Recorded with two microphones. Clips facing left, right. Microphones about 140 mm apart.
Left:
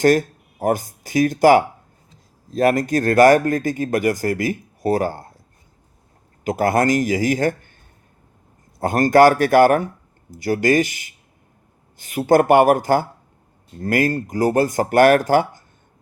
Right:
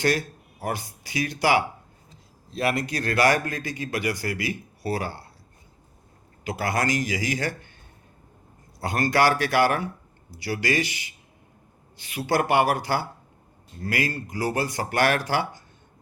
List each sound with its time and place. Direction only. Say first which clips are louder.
0.0 s speech: left 9 dB; 45° left (ahead or behind)
6.4 s speech: left 8 dB; 45° left (ahead or behind)
8.8 s speech: left 9 dB; 50° left (ahead or behind)